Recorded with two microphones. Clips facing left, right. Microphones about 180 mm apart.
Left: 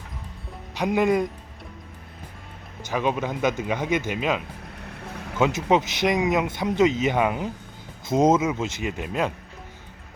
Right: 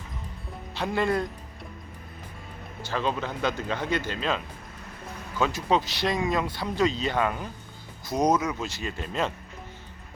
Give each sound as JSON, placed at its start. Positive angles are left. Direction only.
{"t": 0.8, "sound": "speech", "side_deg": 15}
{"t": 2.9, "sound": "a man's voice", "side_deg": 15}